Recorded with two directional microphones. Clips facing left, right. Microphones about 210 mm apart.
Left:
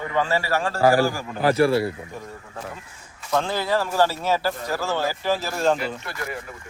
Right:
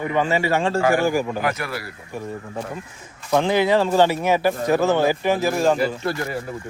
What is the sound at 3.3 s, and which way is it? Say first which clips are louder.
A man's voice: right 5 dB; 15° right (ahead or behind).